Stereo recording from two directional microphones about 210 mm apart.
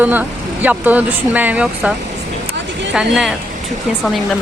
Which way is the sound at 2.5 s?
55° right (ahead or behind).